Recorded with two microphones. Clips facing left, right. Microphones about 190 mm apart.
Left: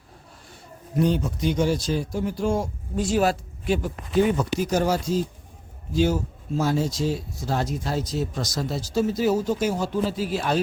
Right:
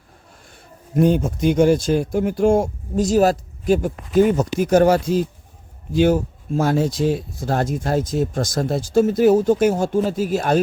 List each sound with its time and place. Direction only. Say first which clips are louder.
0.9 s speech: right 6 dB; 50° right (ahead or behind)